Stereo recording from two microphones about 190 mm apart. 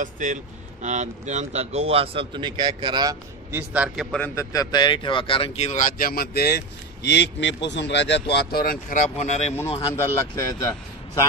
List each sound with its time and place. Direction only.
0.0 s speech: 40° right (ahead or behind); by 3.2 s 20° right (ahead or behind)
3.5 s a man's voice: 5° right (ahead or behind)
4.4 s speech: 20° left (ahead or behind); by 8.7 s 55° left (ahead or behind)
9.1 s speech: 35° left (ahead or behind)
9.7 s a man's voice: 25° left (ahead or behind)